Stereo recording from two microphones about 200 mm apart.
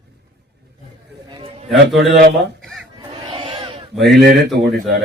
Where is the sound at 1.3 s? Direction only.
30° right (ahead or behind).